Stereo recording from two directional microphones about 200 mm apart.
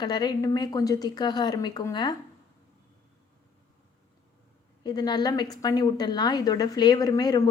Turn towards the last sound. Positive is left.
turn(degrees=20)  # may be behind; listen again after turning